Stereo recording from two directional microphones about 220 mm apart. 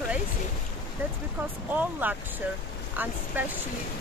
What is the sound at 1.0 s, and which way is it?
Speech, 10° right (ahead or behind).